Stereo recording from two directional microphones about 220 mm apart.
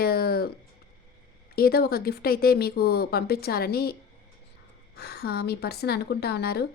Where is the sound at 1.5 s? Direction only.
45° left (ahead or behind).